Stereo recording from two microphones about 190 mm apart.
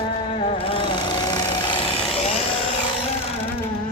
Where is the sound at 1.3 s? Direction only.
25° left (ahead or behind).